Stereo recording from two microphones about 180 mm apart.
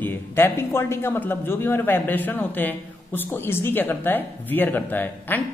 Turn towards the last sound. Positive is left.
turn(degrees=10)  # may be behind; listen again after turning